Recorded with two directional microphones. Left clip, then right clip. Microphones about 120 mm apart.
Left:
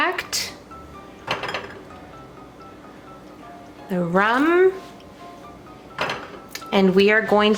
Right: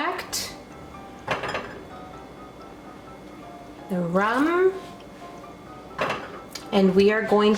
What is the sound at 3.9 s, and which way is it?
Speech, 30° left (ahead or behind).